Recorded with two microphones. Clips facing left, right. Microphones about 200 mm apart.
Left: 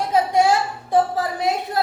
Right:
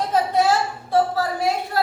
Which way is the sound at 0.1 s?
10° left (ahead or behind).